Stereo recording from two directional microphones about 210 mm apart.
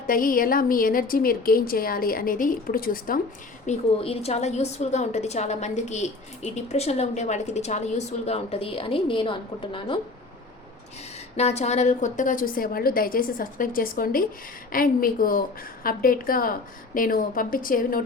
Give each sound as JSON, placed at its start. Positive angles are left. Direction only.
{"t": 0.1, "sound": "a woman's voice", "side_deg": 40}
{"t": 3.7, "sound": "a woman's voice", "side_deg": 30}
{"t": 11.3, "sound": "a woman's voice", "side_deg": 30}